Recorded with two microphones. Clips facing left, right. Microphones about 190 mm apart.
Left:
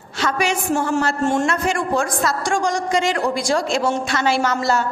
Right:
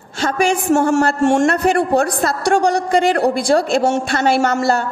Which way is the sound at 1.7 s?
65° right (ahead or behind).